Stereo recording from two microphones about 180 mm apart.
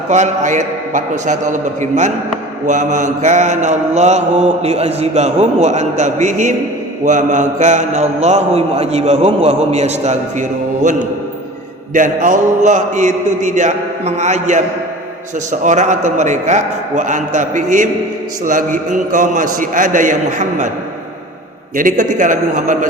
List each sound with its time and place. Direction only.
0.1 s a man's voice: 40° right (ahead or behind)
2.6 s mantra: 45° right (ahead or behind)
11.9 s a man's voice: 45° right (ahead or behind)
15.6 s a man's voice: 40° right (ahead or behind)
21.8 s a man's voice: 45° right (ahead or behind)